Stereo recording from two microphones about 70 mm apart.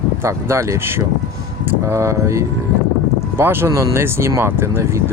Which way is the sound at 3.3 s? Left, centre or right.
Right.